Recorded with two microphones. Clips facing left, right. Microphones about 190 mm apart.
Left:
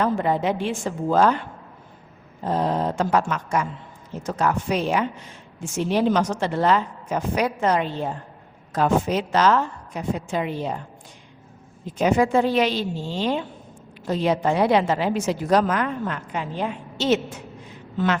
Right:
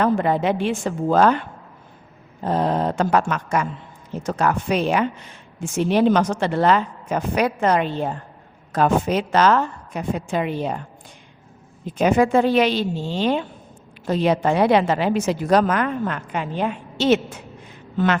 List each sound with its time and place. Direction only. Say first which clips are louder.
0.0 s a woman's voice: right 3 dB; 65° right (ahead or behind)
2.4 s a woman's voice: right 2 dB; 65° right (ahead or behind)
11.9 s a woman's voice: right 2 dB; 60° right (ahead or behind)